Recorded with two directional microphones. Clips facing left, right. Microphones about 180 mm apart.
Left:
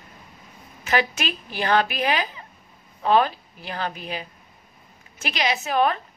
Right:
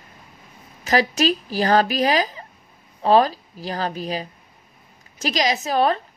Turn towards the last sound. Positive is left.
turn(degrees=-35)  # may be behind; listen again after turning